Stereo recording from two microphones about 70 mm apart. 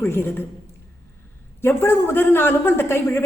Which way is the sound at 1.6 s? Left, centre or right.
Left.